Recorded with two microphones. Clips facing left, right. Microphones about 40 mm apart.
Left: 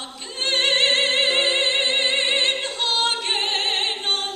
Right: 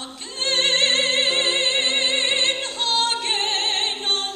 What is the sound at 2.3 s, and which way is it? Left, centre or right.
Opera, left.